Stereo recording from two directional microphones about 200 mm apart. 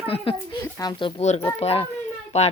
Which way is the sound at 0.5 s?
15° left (ahead or behind).